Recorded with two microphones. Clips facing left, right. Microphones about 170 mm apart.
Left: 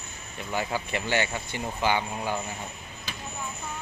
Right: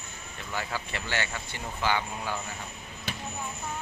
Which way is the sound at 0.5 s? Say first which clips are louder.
Left 5 dB; 15° left (ahead or behind).